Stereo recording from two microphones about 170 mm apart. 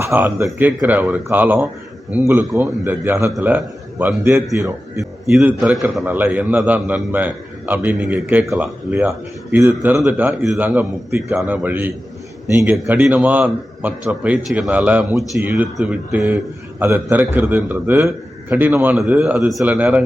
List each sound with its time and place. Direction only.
0.0 s a man's voice: 10° right (ahead or behind)
5.5 s a man's voice: centre (ahead or behind)
12.7 s a man's voice: 5° right (ahead or behind)